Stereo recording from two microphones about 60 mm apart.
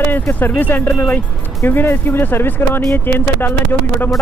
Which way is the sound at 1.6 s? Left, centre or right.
Left.